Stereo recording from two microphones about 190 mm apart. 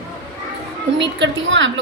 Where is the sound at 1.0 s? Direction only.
70° right (ahead or behind).